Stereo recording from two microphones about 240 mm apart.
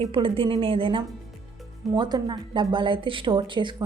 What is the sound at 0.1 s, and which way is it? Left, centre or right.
A woman's voice, right.